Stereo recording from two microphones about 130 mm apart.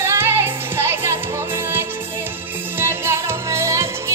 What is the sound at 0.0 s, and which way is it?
Music, 20° right (ahead or behind).